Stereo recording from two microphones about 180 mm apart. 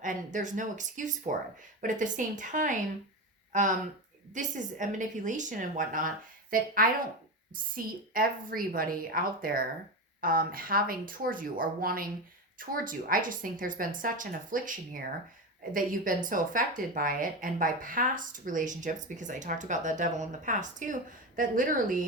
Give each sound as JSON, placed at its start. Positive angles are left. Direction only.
{"t": 0.0, "sound": "speech", "side_deg": -45}
{"t": 7.8, "sound": "speech", "side_deg": -50}